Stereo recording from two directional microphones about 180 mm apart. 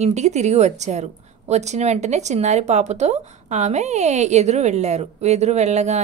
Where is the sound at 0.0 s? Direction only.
40° right (ahead or behind).